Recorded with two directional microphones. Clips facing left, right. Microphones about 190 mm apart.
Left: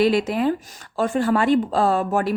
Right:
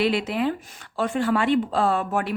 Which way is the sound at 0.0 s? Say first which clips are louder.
Left 4 dB; 40° left (ahead or behind).